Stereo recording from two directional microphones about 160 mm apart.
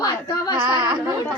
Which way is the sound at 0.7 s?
25° right (ahead or behind).